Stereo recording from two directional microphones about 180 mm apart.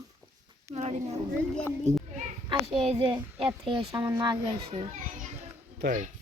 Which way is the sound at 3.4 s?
30° right (ahead or behind).